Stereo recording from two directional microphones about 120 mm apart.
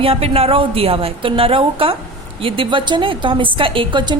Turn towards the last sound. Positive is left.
turn(degrees=-45)  # may be behind; listen again after turning